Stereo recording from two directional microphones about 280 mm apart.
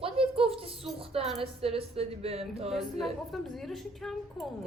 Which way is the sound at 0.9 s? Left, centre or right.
Right.